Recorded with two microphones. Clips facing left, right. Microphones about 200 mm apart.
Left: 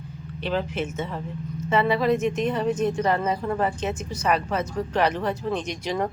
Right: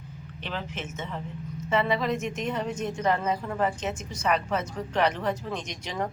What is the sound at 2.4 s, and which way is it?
A woman's voice, 35° left (ahead or behind).